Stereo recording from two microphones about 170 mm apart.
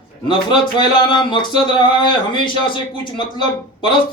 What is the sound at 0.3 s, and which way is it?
A man's voice, 25° left (ahead or behind).